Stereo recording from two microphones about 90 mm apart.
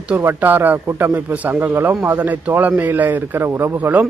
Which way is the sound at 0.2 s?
25° right (ahead or behind).